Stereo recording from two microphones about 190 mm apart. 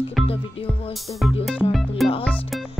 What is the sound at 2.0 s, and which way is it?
Music, centre (ahead or behind).